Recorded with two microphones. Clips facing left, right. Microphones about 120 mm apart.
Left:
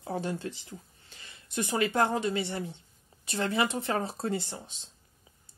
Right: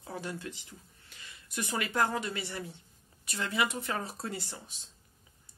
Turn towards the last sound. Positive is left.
turn(degrees=25)  # may be behind; listen again after turning